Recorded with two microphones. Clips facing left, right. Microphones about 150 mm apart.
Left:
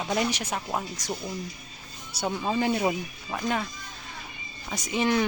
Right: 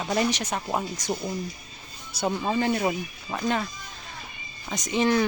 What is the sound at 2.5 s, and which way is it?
Speech, 10° left (ahead or behind).